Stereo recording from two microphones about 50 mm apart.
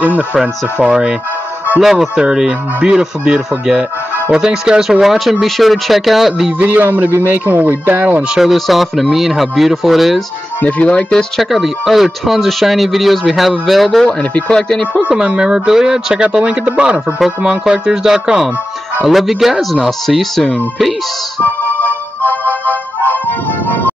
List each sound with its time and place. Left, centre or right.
0.0 s speech: right
0.8 s speech: centre
1.8 s speech: centre
6.6 s speech: right
8.4 s speech: centre
10.6 s speech: left
11.1 s speech: centre
11.5 s speech: centre
14.0 s speech: centre
15.0 s speech: centre
21.7 s music: left